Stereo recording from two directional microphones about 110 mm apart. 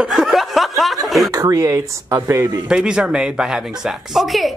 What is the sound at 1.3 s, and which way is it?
Speech, 30° right (ahead or behind).